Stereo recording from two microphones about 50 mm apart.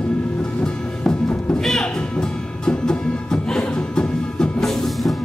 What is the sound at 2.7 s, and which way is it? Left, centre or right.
Music, centre.